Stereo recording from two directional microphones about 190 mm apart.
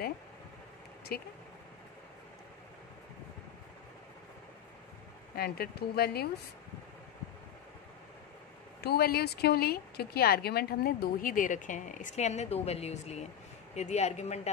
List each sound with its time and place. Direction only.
5.3 s speech: 55° left (ahead or behind)
8.8 s speech: 55° left (ahead or behind); by 14.5 s 35° left (ahead or behind)